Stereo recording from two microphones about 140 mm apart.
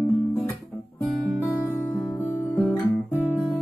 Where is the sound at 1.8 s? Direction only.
15° left (ahead or behind).